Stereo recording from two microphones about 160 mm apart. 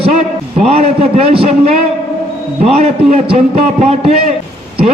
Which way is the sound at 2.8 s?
45° right (ahead or behind).